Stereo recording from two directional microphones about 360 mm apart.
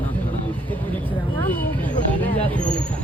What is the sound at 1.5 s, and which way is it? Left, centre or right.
Vehicle, centre.